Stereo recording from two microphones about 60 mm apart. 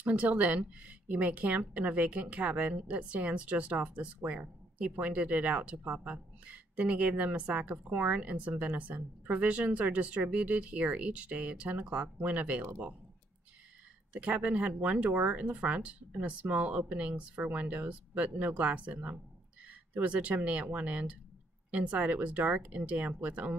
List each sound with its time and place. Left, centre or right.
0.0 s a woman's voice: right
14.1 s a woman's voice: right